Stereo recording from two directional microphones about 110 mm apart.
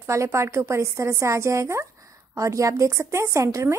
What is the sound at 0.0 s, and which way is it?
A woman's voice, 25° right (ahead or behind).